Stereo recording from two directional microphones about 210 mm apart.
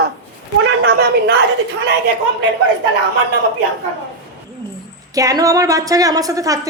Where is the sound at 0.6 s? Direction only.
55° right (ahead or behind).